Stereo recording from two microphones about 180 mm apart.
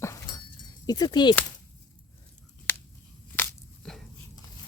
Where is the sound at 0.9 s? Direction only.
25° left (ahead or behind).